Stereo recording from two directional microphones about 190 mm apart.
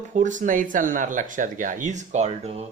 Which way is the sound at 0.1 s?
40° right (ahead or behind).